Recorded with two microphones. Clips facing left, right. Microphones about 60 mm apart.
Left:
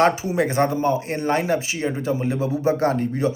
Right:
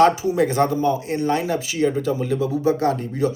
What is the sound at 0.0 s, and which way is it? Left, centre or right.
A man's voice, left.